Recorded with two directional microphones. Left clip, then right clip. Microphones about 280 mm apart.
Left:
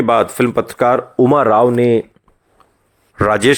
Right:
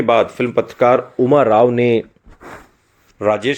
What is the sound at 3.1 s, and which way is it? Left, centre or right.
Speech, left.